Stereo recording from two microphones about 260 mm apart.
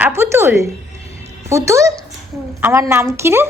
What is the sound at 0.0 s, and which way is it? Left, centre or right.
Music, centre.